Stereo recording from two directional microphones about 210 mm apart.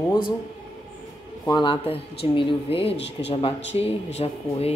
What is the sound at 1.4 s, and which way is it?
Speech, 20° left (ahead or behind).